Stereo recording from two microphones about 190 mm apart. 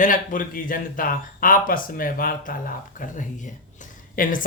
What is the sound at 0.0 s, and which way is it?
Speech, 45° left (ahead or behind).